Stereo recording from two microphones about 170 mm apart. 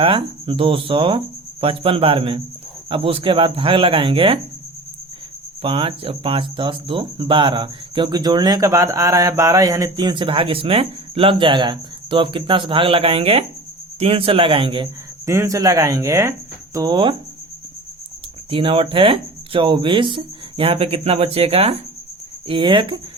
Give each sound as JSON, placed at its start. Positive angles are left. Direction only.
{"t": 0.0, "sound": "speech", "side_deg": -30}
{"t": 5.6, "sound": "speech", "side_deg": -30}
{"t": 15.3, "sound": "speech", "side_deg": -20}
{"t": 18.5, "sound": "speech", "side_deg": -30}